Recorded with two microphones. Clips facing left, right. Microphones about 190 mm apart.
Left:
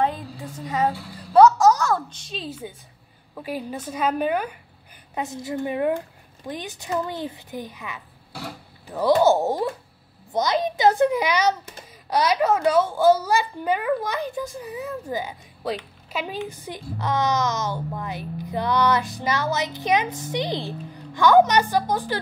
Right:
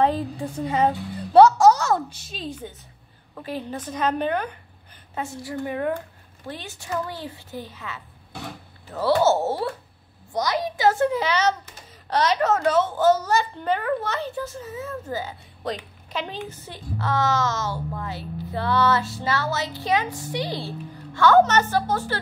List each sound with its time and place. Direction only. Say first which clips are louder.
0.0 s a woman's voice: right 3 dB; 35° right (ahead or behind)
1.0 s music: even; 30° right (ahead or behind)
2.0 s a woman's voice: even; 5° right (ahead or behind); by 22.2 s 15° left (ahead or behind)